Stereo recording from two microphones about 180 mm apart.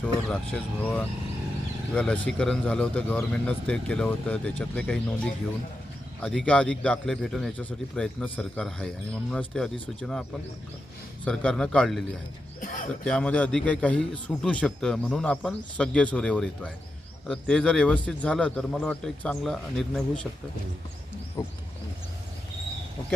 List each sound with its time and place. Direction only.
0.0 s a man's voice: 5° left (ahead or behind)
6.2 s a man's voice: 5° left (ahead or behind)
11.3 s a man's voice: 5° left (ahead or behind)
12.5 s a sound: 45° left (ahead or behind)
13.1 s a man's voice: 5° left (ahead or behind)
21.4 s wild animals: 20° left (ahead or behind)